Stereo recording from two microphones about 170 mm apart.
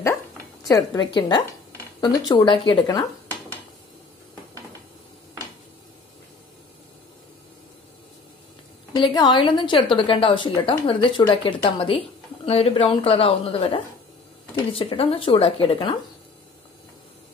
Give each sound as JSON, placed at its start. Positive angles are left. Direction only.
{"t": 0.7, "sound": "a woman's voice", "side_deg": 20}
{"t": 8.9, "sound": "a woman's voice", "side_deg": 25}